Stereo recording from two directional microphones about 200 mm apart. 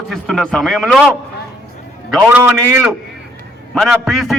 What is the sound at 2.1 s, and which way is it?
A man's voice, 5° right (ahead or behind).